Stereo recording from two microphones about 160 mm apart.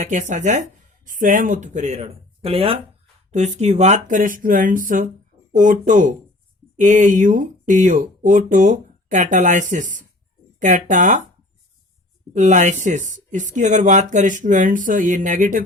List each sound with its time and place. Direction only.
0.0 s speech: 50° right (ahead or behind)
12.3 s speech: 50° right (ahead or behind)